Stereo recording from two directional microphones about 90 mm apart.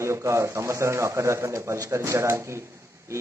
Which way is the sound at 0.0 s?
30° right (ahead or behind).